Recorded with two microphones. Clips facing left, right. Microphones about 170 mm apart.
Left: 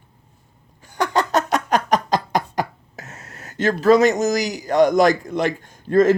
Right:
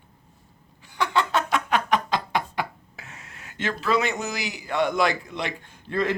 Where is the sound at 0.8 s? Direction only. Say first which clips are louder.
Left 4 dB; 45° left (ahead or behind).